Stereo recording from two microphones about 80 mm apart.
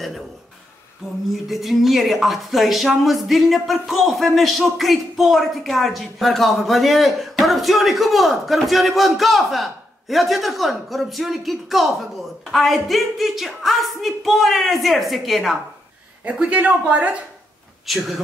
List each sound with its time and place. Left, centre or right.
1.3 s speech: centre
16.3 s a man's voice: centre
17.8 s speech: centre